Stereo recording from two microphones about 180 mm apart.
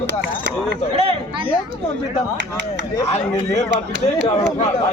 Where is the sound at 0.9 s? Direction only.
30° right (ahead or behind).